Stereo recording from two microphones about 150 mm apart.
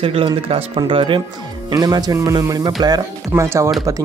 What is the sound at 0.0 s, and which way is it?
Speech, 40° right (ahead or behind).